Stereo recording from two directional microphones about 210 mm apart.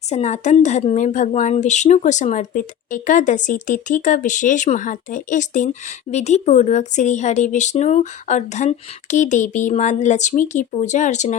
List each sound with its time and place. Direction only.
0.1 s a woman's voice: 35° left (ahead or behind)